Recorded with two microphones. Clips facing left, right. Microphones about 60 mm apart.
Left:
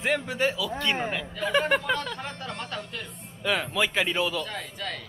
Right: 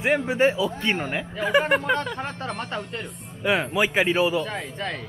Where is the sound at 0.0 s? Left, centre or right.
Right.